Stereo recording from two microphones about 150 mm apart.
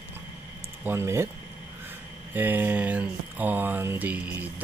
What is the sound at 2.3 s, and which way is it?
Speech, 10° right (ahead or behind).